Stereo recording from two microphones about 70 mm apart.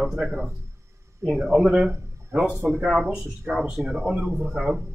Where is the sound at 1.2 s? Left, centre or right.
Centre.